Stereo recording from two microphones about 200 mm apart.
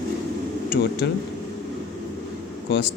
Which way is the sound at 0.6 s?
55° left (ahead or behind).